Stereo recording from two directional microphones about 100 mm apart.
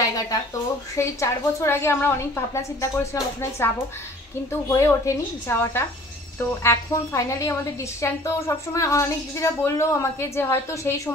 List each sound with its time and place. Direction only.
0.9 s a woman's voice: 30° left (ahead or behind)